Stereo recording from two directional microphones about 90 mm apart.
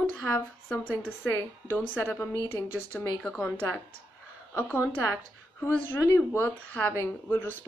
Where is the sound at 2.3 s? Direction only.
35° left (ahead or behind).